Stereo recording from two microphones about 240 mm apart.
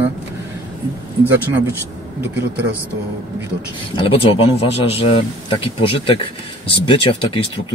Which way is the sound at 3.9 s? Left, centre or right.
Left.